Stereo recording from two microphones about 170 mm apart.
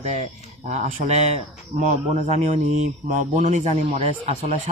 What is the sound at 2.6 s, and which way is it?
A man's voice, 50° right (ahead or behind).